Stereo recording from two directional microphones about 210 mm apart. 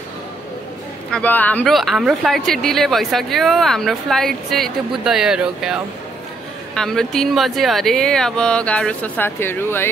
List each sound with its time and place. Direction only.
1.1 s a woman's voice: 10° left (ahead or behind)